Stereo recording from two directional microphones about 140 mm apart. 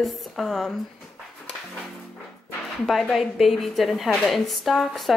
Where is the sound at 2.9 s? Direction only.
Centre (ahead or behind).